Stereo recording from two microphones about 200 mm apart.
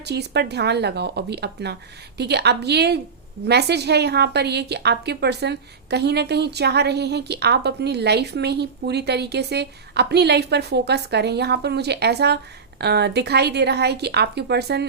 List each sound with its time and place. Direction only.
0.0 s a woman's voice: 55° right (ahead or behind)